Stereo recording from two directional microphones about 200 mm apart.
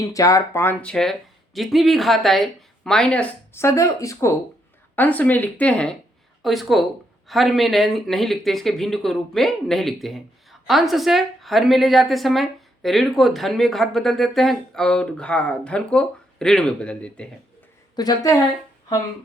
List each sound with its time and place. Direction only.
0.0 s speech: 15° left (ahead or behind)
17.9 s a woman's voice: 20° left (ahead or behind)